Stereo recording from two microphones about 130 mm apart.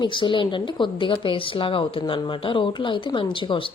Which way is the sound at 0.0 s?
40° left (ahead or behind).